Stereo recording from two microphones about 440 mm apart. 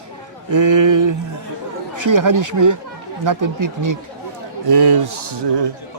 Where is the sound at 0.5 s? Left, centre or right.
Right.